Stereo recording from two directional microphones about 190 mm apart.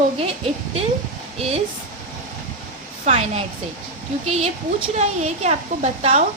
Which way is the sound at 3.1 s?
35° right (ahead or behind).